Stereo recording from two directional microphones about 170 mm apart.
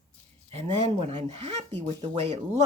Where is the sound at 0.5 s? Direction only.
35° right (ahead or behind).